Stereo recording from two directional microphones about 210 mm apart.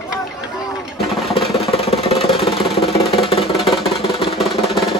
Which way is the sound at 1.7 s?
30° left (ahead or behind).